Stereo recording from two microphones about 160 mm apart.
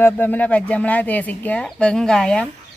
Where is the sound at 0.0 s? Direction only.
10° left (ahead or behind).